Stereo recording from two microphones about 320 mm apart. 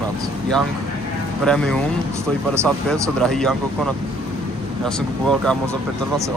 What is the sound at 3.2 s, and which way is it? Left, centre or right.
Speech, centre.